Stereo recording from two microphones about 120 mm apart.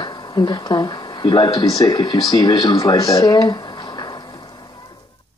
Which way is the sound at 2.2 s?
30° left (ahead or behind).